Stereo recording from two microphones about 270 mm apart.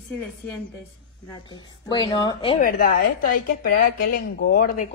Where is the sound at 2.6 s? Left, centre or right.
Left.